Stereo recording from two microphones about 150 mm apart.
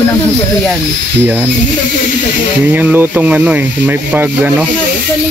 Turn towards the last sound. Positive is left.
turn(degrees=-10)  # may be behind; listen again after turning